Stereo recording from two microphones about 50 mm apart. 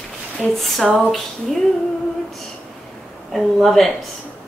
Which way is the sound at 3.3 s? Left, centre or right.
Centre.